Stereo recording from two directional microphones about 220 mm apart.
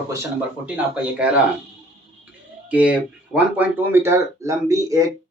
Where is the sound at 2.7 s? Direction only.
5° right (ahead or behind).